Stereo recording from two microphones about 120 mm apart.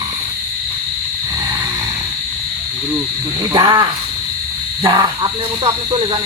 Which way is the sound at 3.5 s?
35° right (ahead or behind).